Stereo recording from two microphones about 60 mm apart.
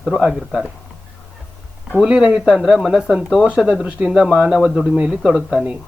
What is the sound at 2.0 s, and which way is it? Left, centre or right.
Speech, centre.